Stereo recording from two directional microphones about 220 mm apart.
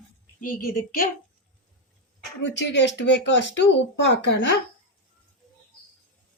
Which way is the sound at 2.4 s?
55° left (ahead or behind).